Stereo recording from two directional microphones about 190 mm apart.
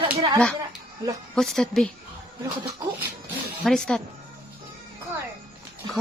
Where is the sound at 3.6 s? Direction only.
Centre (ahead or behind).